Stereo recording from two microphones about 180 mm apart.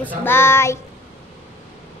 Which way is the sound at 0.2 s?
15° left (ahead or behind).